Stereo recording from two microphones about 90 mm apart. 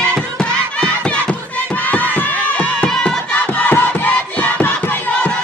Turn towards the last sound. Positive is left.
turn(degrees=20)  # may be behind; listen again after turning